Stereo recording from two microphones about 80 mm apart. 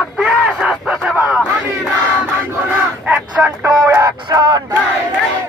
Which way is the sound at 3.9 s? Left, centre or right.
Right.